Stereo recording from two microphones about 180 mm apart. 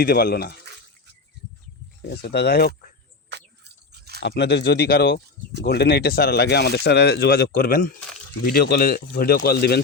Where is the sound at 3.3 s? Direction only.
65° right (ahead or behind).